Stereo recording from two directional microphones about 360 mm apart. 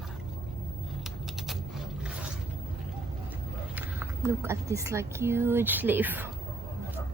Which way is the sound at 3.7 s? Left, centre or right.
Centre.